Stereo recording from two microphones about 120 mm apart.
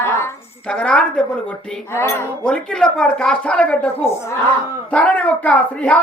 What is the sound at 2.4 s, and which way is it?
A woman's voice, 5° left (ahead or behind).